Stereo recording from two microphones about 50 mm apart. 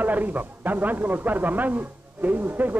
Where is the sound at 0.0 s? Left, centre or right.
Right.